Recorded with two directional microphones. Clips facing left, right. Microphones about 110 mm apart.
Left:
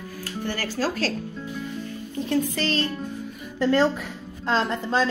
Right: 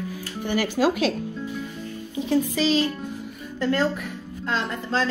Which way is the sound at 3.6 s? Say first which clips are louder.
Left 3 dB; 20° left (ahead or behind).